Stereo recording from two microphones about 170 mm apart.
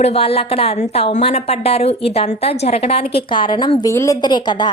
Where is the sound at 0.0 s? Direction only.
35° left (ahead or behind).